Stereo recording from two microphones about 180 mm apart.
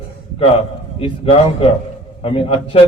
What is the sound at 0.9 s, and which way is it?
A man's voice, 30° left (ahead or behind).